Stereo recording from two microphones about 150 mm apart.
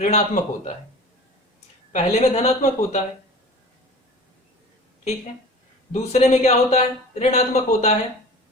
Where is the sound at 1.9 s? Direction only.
50° left (ahead or behind).